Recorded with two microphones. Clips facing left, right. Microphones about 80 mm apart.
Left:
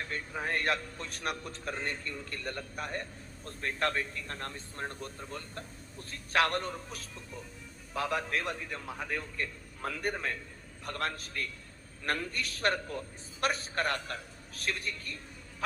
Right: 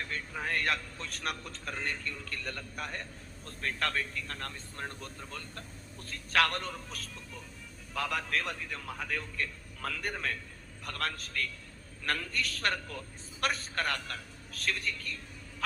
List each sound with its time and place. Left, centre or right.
0.0 s a man's voice: left